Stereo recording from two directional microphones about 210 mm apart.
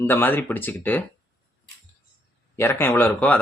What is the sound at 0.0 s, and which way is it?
Speech, 10° left (ahead or behind).